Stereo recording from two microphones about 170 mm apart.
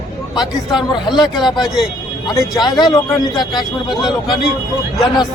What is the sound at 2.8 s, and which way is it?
Speech, 25° left (ahead or behind).